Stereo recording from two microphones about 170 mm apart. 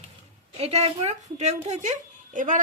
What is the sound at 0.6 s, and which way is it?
Speech, 35° right (ahead or behind).